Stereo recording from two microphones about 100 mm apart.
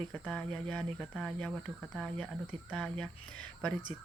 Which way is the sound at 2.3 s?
5° left (ahead or behind).